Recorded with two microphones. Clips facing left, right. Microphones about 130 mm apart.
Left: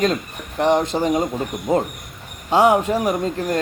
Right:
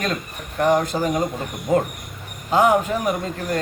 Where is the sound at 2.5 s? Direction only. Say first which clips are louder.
Left 2 dB; 30° left (ahead or behind).